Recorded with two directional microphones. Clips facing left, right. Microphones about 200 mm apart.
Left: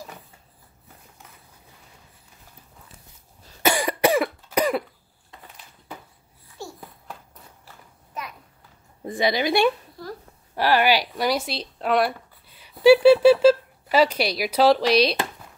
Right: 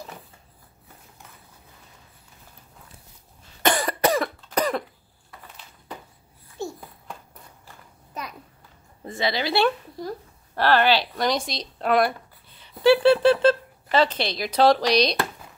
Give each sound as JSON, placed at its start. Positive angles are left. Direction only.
{"t": 3.6, "sound": "cough", "side_deg": 10}
{"t": 9.0, "sound": "speech", "side_deg": 15}